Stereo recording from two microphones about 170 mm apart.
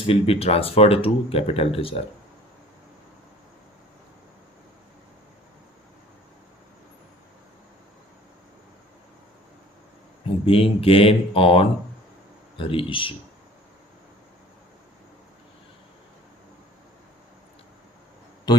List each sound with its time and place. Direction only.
0.1 s speech: 35° left (ahead or behind)
10.4 s speech: 35° left (ahead or behind)
18.5 s speech: 25° left (ahead or behind)